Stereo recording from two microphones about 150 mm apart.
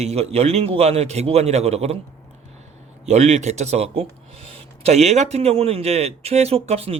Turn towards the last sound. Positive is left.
turn(degrees=-45)  # may be behind; listen again after turning